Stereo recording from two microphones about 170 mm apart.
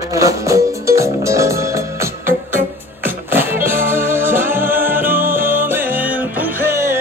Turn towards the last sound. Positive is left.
turn(degrees=-15)  # may be behind; listen again after turning